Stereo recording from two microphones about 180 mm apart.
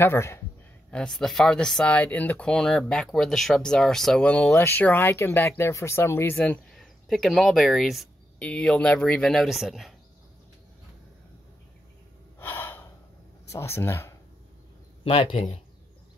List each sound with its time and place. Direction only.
0.0 s speech: 15° left (ahead or behind)
0.9 s speech: 5° left (ahead or behind)
12.4 s gasp: 15° left (ahead or behind)
13.5 s speech: 15° left (ahead or behind)
15.0 s speech: 30° left (ahead or behind)